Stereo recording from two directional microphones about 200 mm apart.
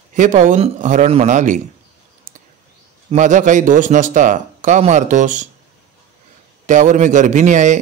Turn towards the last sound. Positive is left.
turn(degrees=-35)  # may be behind; listen again after turning